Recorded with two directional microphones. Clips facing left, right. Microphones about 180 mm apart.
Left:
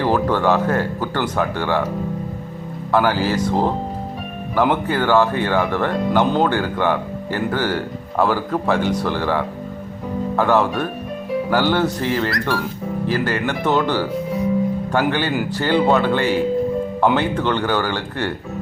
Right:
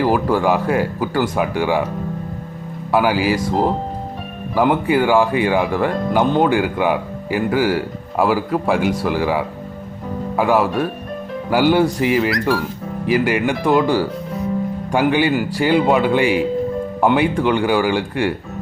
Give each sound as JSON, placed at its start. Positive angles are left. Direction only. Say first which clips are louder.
{"t": 0.0, "sound": "speech", "louder": "right 1 dB", "side_deg": -10}
{"t": 2.9, "sound": "speech", "louder": "right 1 dB", "side_deg": -10}